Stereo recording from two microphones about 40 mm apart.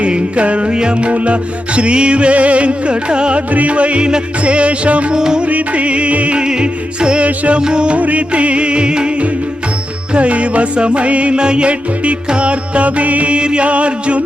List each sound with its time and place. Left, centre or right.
0.0 s music: right
3.5 s music: right
5.1 s music: centre
5.5 s music: right
7.3 s music: right
7.9 s music: right